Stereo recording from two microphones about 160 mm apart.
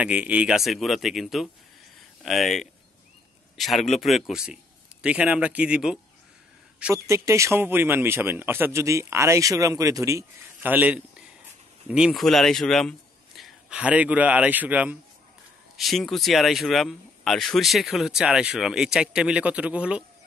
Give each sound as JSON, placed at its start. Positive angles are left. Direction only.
{"t": 0.0, "sound": "a man's voice", "side_deg": -10}